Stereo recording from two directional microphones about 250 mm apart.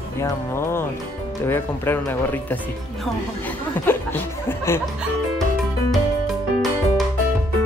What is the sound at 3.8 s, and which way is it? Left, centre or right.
Music, centre.